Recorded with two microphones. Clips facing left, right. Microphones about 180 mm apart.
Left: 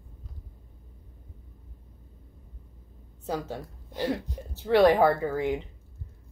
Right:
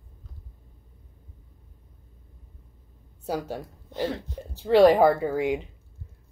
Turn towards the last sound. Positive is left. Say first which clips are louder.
# right 2 dB
turn(degrees=-15)  # may be behind; listen again after turning